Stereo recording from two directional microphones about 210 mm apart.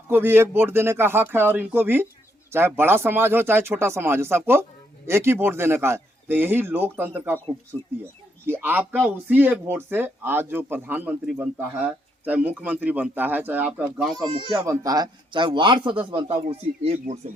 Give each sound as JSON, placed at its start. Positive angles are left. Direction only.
{"t": 0.1, "sound": "speech", "side_deg": -10}
{"t": 8.4, "sound": "speech", "side_deg": -10}
{"t": 14.2, "sound": "speech", "side_deg": -15}